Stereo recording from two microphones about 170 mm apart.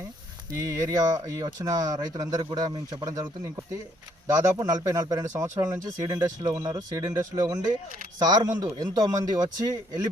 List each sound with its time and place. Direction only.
0.9 s speech: 20° right (ahead or behind)